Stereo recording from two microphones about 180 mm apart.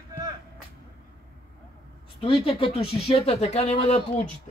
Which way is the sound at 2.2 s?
30° left (ahead or behind).